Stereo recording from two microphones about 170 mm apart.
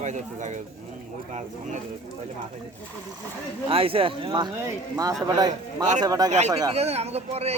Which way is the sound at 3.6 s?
35° right (ahead or behind).